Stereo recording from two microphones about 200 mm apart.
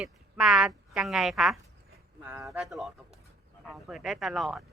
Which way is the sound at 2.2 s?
15° right (ahead or behind).